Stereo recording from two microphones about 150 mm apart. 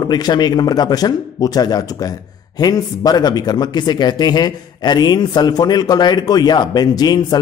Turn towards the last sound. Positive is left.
turn(degrees=30)  # may be behind; listen again after turning